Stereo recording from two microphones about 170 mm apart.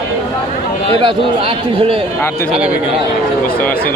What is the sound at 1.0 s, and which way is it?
A man's voice, 30° right (ahead or behind).